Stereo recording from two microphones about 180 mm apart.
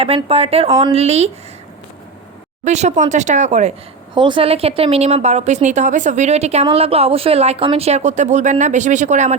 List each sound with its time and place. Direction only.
0.0 s speech: 35° right (ahead or behind)
2.6 s speech: 40° right (ahead or behind)
4.1 s speech: 25° right (ahead or behind)